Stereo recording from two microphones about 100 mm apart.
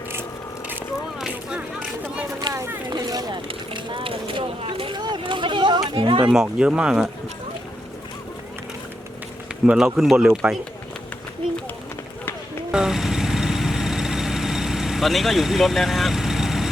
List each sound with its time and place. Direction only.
1.2 s a sound: 10° right (ahead or behind)
2.5 s a sound: 30° right (ahead or behind)
2.9 s vehicle: 40° right (ahead or behind); by 6.2 s 55° right (ahead or behind)
6.2 s speech: 10° right (ahead or behind)
9.6 s speech: 5° right (ahead or behind)
12.7 s vehicle: 5° right (ahead or behind)